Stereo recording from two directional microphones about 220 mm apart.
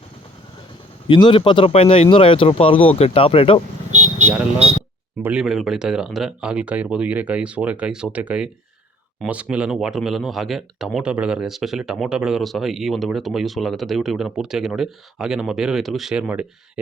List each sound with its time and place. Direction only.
1.0 s speech: 25° left (ahead or behind)
3.9 s vehicle: 30° right (ahead or behind)
5.2 s speech: 5° right (ahead or behind)